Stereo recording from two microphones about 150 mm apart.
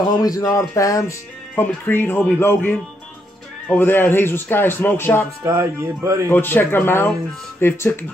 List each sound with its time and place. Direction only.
0.1 s speech: 25° left (ahead or behind)
5.4 s speech: 20° right (ahead or behind)
6.2 s speech: 15° left (ahead or behind)